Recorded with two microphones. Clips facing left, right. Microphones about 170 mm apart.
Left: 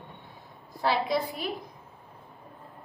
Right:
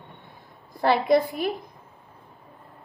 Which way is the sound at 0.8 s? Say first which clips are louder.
Right 7 dB; 55° right (ahead or behind).